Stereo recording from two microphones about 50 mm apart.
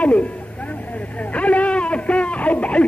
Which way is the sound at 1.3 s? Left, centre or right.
Left.